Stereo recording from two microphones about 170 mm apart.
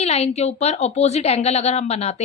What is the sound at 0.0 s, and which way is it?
A woman's voice, 40° left (ahead or behind).